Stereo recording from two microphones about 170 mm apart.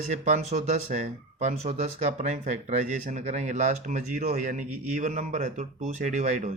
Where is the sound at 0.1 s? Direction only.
45° right (ahead or behind).